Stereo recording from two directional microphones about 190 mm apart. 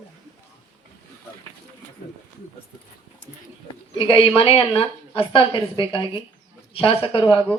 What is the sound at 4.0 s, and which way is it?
Speech, 30° left (ahead or behind).